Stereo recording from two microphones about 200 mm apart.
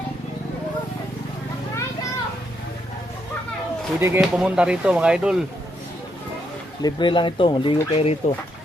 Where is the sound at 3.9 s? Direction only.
10° right (ahead or behind).